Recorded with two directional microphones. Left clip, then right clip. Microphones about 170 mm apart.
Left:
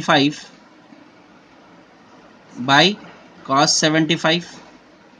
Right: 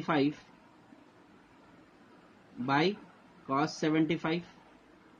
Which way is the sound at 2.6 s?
50° left (ahead or behind).